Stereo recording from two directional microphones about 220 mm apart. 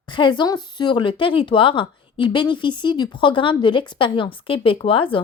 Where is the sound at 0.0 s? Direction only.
20° left (ahead or behind).